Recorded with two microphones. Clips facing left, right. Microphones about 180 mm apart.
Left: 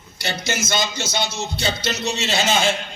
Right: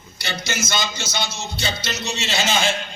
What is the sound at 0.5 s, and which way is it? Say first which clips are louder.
Speech: left 2 dB; 55° left (ahead or behind).